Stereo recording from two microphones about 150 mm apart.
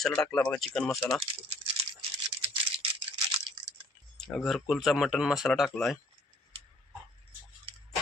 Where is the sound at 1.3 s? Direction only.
40° right (ahead or behind).